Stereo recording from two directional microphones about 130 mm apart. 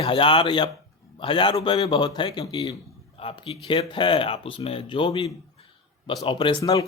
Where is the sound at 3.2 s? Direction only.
45° left (ahead or behind).